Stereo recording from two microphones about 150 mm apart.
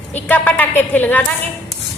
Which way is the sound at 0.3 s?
10° left (ahead or behind).